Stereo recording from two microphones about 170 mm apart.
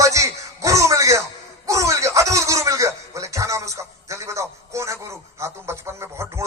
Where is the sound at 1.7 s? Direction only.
20° right (ahead or behind).